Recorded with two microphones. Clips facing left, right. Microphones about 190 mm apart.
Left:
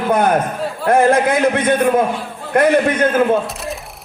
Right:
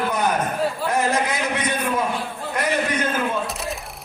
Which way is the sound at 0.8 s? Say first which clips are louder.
Left 12 dB; 55° left (ahead or behind).